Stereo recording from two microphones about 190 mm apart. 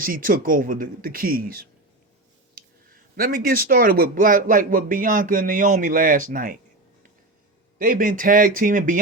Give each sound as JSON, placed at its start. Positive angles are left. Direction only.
{"t": 0.0, "sound": "speech", "side_deg": -45}
{"t": 7.8, "sound": "speech", "side_deg": -50}